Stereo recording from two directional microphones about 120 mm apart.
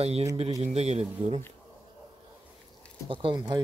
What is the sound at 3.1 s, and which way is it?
Speech, 45° right (ahead or behind).